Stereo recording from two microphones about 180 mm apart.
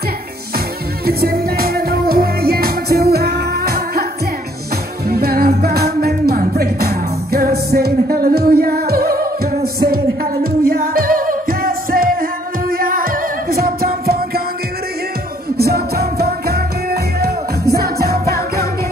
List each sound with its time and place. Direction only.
1.0 s music: 55° right (ahead or behind)
5.0 s music: 60° right (ahead or behind)
15.5 s music: 60° right (ahead or behind)